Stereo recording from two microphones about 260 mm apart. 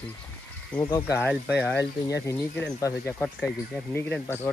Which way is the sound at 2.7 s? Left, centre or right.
Centre.